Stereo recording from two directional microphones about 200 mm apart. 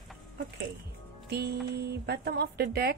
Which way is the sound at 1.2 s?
55° right (ahead or behind).